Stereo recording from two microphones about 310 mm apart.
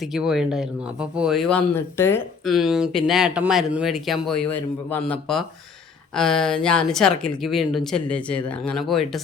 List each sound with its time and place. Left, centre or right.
0.0 s speech: centre